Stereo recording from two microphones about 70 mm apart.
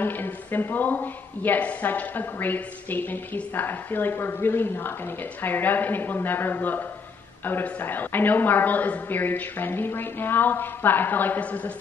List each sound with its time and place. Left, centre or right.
0.0 s a woman's voice: left